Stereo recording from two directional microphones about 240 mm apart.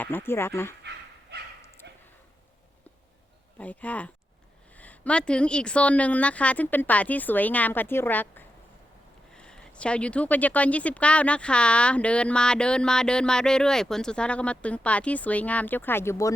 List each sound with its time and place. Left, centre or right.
0.0 s a woman's voice: centre
1.8 s a sound: right
3.6 s a woman's voice: centre